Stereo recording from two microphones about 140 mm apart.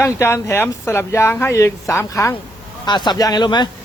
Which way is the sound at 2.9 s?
30° left (ahead or behind).